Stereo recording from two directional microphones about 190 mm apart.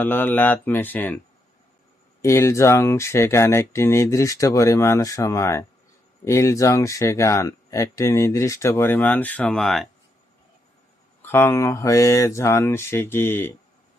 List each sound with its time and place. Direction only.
0.0 s speech: 10° left (ahead or behind)
2.2 s speech: 15° left (ahead or behind)
11.2 s speech: 10° left (ahead or behind)